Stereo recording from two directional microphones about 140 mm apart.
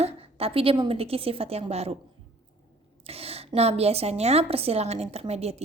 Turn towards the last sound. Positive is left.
turn(degrees=-50)  # may be behind; listen again after turning